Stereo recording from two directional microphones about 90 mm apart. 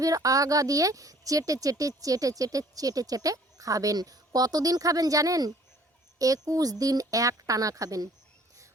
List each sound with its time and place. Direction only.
0.0 s speech: 40° right (ahead or behind)